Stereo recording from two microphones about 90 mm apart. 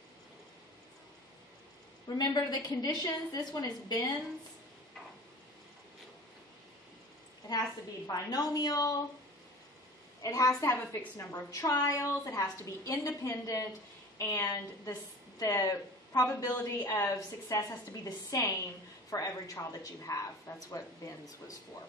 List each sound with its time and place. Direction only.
2.1 s a woman's voice: 50° left (ahead or behind)
8.1 s a woman's voice: 45° left (ahead or behind)
10.2 s a woman's voice: 40° left (ahead or behind)
10.7 s a woman's voice: 20° left (ahead or behind)
11.1 s a woman's voice: 40° left (ahead or behind)
14.5 s a woman's voice: 45° left (ahead or behind); by 17.6 s 25° left (ahead or behind)
17.6 s a woman's voice: 40° left (ahead or behind)